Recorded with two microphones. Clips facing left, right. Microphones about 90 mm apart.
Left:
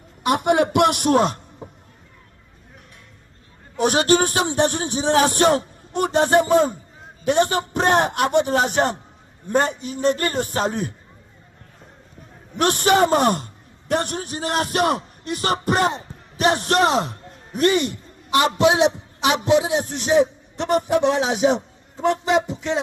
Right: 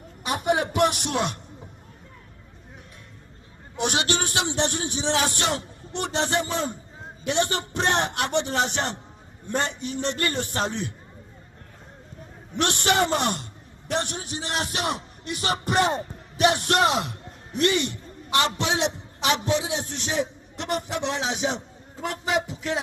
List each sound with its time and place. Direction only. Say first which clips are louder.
0.3 s a man's voice: left 6 dB; 65° left (ahead or behind); by 1.4 s 40° left (ahead or behind)
3.8 s a man's voice: left 8 dB; 45° left (ahead or behind)
12.5 s a man's voice: left 6 dB; 45° left (ahead or behind)
22.0 s a man's voice: left 7 dB; 25° left (ahead or behind)